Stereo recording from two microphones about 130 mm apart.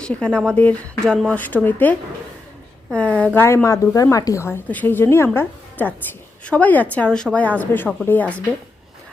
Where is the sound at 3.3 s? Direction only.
20° left (ahead or behind).